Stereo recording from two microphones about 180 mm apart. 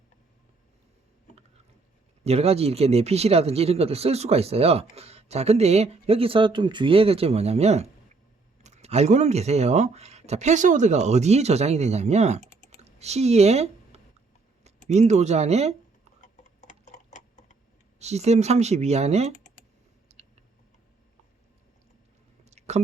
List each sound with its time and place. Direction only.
2.2 s speech: 35° right (ahead or behind)
12.8 s a sound: 35° right (ahead or behind)
14.8 s speech: 40° right (ahead or behind)
16.2 s tick-tock: 45° left (ahead or behind)
18.0 s speech: 40° right (ahead or behind)
22.4 s chewing: 40° right (ahead or behind)